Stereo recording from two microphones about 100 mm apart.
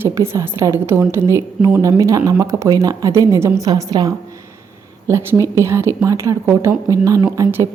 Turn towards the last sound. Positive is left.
turn(degrees=-30)  # may be behind; listen again after turning